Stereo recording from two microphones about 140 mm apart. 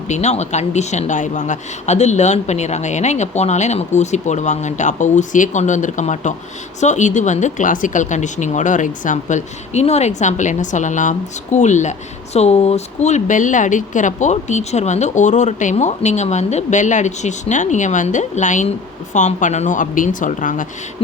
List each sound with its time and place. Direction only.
0.1 s speech: 55° left (ahead or behind)